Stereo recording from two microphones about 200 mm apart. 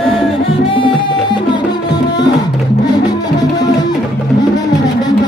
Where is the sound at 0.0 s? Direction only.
25° left (ahead or behind).